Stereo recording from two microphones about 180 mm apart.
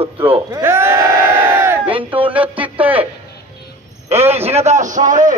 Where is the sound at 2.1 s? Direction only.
30° right (ahead or behind).